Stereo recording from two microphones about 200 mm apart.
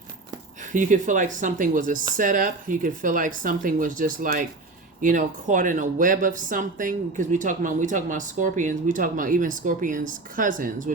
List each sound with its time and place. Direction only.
0.7 s speech: 40° right (ahead or behind)